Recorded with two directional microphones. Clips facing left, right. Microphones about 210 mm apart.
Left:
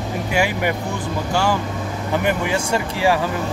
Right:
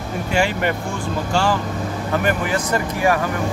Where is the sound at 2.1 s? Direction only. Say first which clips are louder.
Left 1 dB; 15° left (ahead or behind).